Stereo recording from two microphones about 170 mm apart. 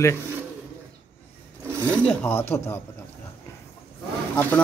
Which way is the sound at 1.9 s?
10° left (ahead or behind).